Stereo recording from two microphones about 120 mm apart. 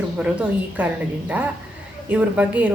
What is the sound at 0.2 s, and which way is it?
Speech, 10° right (ahead or behind).